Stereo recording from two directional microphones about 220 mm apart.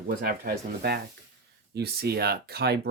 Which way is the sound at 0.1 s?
40° right (ahead or behind).